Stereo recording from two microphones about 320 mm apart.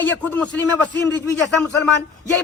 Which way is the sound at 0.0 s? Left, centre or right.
Centre.